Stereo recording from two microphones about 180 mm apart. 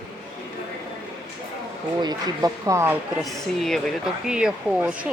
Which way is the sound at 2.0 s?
20° right (ahead or behind).